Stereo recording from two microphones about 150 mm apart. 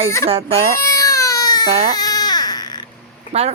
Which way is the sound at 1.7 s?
45° right (ahead or behind).